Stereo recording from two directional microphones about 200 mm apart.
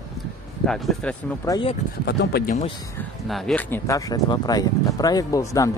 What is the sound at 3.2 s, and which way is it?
Speech, centre (ahead or behind).